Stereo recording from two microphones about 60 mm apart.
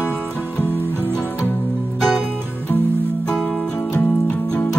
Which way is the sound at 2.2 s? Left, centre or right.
Right.